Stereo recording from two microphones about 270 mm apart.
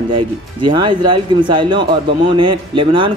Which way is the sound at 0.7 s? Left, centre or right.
Centre.